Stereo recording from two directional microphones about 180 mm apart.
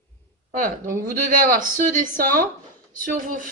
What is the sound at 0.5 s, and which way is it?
A woman's voice, 50° right (ahead or behind).